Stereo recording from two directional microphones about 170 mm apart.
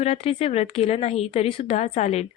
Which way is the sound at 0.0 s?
35° left (ahead or behind).